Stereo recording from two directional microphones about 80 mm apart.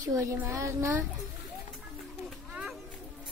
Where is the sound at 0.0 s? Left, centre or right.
Right.